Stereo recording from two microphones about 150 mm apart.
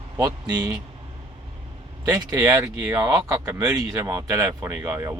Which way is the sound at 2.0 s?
25° right (ahead or behind).